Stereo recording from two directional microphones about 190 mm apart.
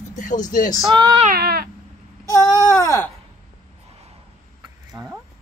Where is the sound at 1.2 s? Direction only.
55° right (ahead or behind).